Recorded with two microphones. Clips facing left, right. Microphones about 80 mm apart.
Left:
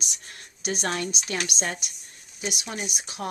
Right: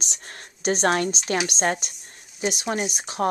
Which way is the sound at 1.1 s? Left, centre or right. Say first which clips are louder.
Right 5 dB; right.